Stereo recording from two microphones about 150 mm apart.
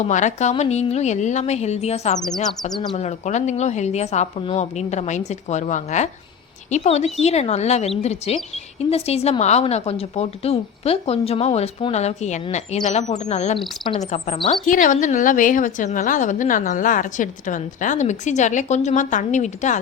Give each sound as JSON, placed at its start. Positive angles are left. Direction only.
{"t": 0.0, "sound": "a woman's voice", "side_deg": 55}
{"t": 14.7, "sound": "a woman's voice", "side_deg": 60}